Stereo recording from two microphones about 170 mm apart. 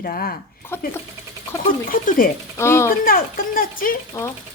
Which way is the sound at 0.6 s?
15° left (ahead or behind).